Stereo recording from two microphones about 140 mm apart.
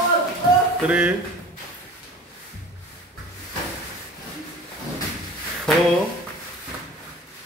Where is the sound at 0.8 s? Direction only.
10° right (ahead or behind).